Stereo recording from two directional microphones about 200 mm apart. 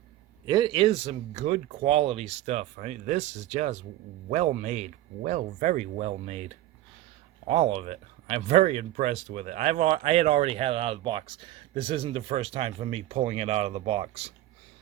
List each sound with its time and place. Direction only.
0.4 s speech: 20° right (ahead or behind)